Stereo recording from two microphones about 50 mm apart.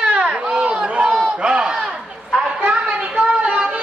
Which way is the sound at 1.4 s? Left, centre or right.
Centre.